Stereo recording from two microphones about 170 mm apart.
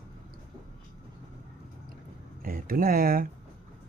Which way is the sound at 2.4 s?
60° right (ahead or behind).